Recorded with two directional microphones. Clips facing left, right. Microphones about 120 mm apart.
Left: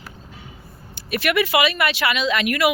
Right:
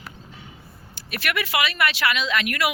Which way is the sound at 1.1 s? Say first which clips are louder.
Left 6 dB; 15° left (ahead or behind).